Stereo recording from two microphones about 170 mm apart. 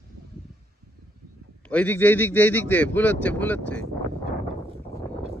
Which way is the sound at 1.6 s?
10° left (ahead or behind).